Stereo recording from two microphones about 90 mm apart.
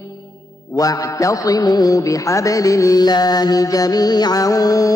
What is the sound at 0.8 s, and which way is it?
Music, 40° left (ahead or behind).